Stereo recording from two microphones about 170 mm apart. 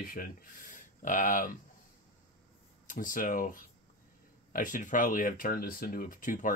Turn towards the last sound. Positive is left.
turn(degrees=50)  # may be behind; listen again after turning